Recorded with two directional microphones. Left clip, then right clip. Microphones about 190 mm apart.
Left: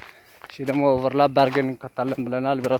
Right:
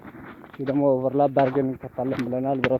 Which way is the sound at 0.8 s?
35° left (ahead or behind).